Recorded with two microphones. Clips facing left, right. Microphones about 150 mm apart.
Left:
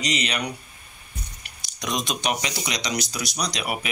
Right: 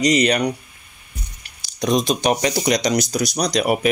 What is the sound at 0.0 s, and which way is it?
Speech, 45° right (ahead or behind).